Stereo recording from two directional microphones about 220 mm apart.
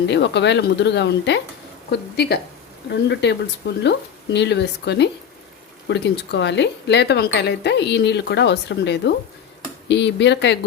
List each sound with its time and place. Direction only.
0.1 s speech: 50° left (ahead or behind)